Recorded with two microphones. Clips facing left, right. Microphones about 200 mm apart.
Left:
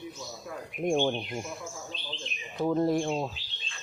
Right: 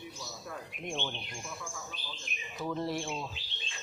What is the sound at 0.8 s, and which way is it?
Speech, 45° left (ahead or behind).